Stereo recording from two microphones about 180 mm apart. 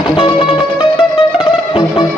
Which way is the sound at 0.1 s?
25° left (ahead or behind).